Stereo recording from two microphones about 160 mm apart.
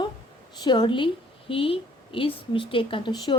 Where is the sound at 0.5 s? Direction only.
25° left (ahead or behind).